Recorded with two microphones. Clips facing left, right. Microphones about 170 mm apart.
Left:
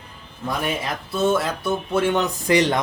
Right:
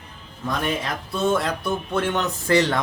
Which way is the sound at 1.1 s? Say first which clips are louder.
Left 1 dB; 5° left (ahead or behind).